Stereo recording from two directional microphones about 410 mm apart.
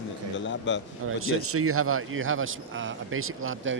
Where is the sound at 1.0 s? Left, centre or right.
Right.